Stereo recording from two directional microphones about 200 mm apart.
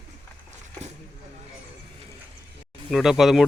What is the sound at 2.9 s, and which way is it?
Speech, centre (ahead or behind).